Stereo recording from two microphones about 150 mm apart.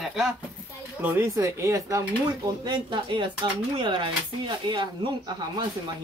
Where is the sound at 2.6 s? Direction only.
30° right (ahead or behind).